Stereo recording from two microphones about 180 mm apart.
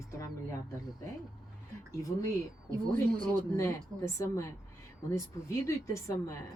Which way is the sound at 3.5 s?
15° left (ahead or behind).